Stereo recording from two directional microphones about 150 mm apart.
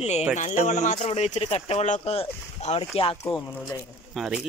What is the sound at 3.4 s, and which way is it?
Speech, 15° left (ahead or behind).